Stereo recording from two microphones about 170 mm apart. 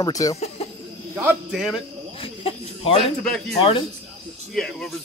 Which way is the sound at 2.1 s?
35° left (ahead or behind).